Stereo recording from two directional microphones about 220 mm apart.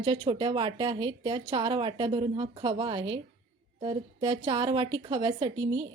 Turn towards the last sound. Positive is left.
turn(degrees=-20)  # may be behind; listen again after turning